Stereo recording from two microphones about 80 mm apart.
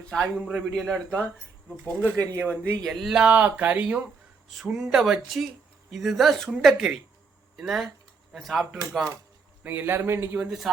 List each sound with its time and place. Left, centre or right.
0.1 s a man's voice: centre
2.4 s a man's voice: centre
2.8 s speech: centre
3.2 s speech: centre
4.7 s speech: centre
9.6 s speech: right